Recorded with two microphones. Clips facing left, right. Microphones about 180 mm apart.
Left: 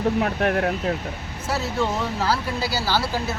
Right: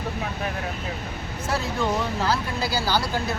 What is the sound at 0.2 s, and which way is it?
Speech, 75° left (ahead or behind).